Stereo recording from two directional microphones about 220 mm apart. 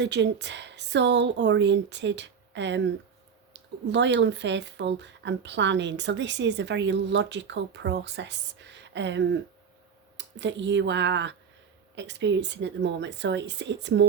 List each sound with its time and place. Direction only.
0.0 s speech: 50° right (ahead or behind)